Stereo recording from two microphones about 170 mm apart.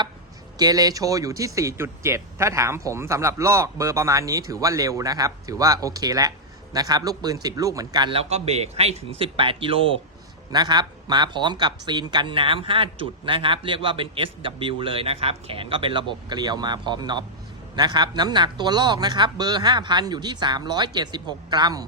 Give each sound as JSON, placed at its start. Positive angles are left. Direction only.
{"t": 0.6, "sound": "speech", "side_deg": -20}